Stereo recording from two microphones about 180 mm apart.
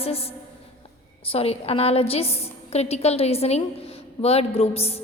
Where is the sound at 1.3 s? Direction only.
35° left (ahead or behind).